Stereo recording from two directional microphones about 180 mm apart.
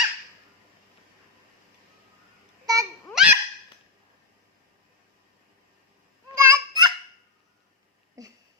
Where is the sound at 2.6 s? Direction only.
20° right (ahead or behind).